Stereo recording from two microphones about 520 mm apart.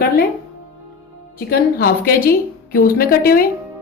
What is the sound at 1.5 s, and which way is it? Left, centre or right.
A woman's voice, centre.